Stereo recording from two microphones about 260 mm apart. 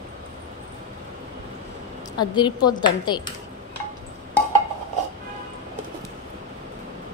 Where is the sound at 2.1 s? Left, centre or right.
Centre.